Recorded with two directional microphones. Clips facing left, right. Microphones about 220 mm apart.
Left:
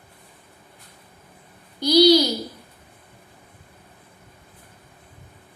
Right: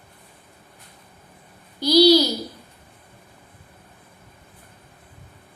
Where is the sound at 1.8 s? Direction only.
15° left (ahead or behind).